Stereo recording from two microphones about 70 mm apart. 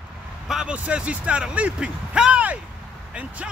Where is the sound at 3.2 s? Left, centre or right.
Centre.